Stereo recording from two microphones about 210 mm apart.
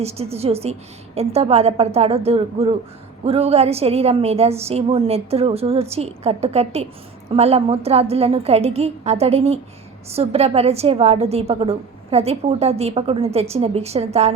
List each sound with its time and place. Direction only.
0.0 s a woman's voice: 30° right (ahead or behind)